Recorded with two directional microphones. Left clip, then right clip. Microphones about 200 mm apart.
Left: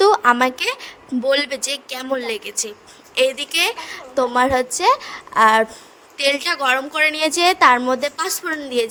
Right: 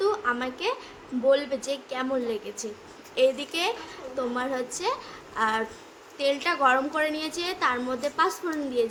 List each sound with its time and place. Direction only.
0.0 s a woman's voice: 50° left (ahead or behind)